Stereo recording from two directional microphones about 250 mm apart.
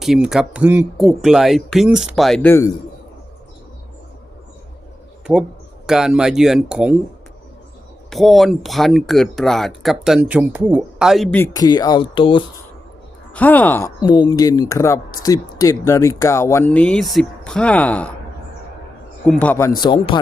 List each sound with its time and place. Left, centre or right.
0.0 s speech: centre
5.2 s speech: centre
8.1 s speech: centre
13.3 s speech: centre
19.2 s speech: centre